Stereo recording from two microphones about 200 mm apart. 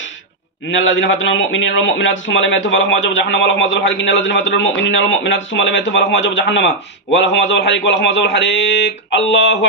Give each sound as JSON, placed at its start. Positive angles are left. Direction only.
{"t": 0.7, "sound": "a man's voice", "side_deg": 70}